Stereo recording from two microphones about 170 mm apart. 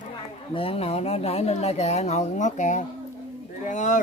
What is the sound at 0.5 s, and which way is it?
Speech, 35° left (ahead or behind).